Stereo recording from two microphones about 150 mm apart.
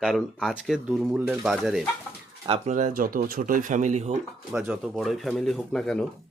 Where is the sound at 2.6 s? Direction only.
55° right (ahead or behind).